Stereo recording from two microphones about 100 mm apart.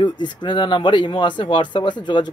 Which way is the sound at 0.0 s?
50° left (ahead or behind).